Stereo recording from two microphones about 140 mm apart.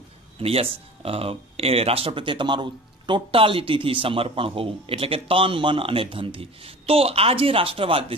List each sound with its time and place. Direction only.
0.4 s speech: 45° right (ahead or behind)